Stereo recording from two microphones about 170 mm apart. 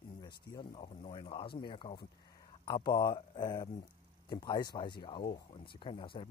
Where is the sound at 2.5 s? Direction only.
30° left (ahead or behind).